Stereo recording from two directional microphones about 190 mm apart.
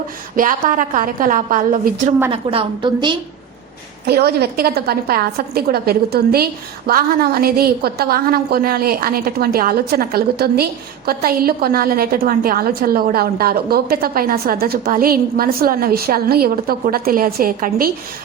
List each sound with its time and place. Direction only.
0.3 s a woman's voice: 45° right (ahead or behind)
2.3 s a woman's voice: 30° right (ahead or behind)
4.0 s a woman's voice: 55° right (ahead or behind)